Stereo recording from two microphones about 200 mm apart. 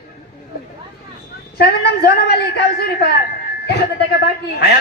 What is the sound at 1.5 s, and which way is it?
A man's voice, 55° left (ahead or behind).